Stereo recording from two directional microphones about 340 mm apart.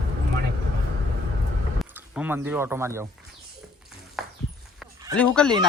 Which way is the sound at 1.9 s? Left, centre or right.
Centre.